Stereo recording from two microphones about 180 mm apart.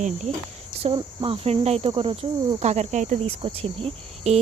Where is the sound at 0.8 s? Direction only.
30° right (ahead or behind).